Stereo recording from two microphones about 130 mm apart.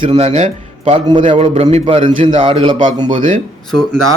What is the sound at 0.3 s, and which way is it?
Speech, 55° right (ahead or behind).